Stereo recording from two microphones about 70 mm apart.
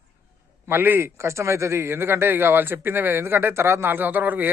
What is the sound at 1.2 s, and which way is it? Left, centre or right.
Speech, right.